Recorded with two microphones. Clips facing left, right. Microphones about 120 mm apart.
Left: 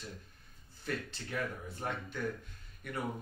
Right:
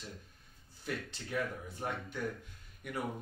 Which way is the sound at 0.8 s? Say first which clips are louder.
Left 1 dB; 15° right (ahead or behind).